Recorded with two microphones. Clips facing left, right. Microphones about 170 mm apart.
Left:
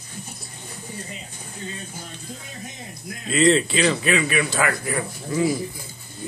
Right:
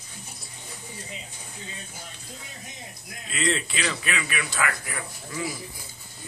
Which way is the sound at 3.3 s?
30° left (ahead or behind).